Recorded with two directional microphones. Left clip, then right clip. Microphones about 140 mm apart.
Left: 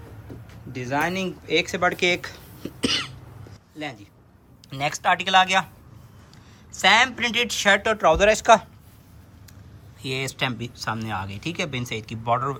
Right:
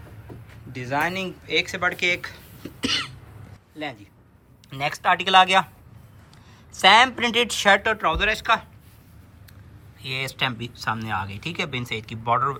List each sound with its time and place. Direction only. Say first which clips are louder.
0.7 s speech: even; 20° left (ahead or behind)
1.5 s cough: left 1 dB; 35° left (ahead or behind)
3.8 s speech: right 1 dB; 10° left (ahead or behind)
6.7 s a woman's voice: right 3 dB; 5° left (ahead or behind)
7.8 s speech: left 4 dB; 20° left (ahead or behind)
10.0 s speech: right 1 dB; 20° left (ahead or behind)